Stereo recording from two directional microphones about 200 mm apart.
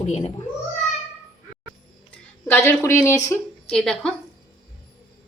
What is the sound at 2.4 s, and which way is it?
Speech, 10° left (ahead or behind).